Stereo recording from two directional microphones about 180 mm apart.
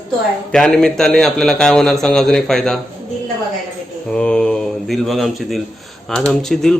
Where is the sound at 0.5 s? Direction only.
5° left (ahead or behind).